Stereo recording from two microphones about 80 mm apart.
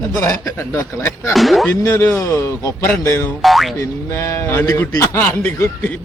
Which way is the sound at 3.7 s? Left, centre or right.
Left.